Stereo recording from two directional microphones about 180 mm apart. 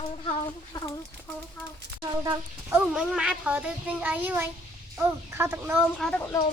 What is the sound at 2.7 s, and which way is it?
A child's voice, 5° right (ahead or behind).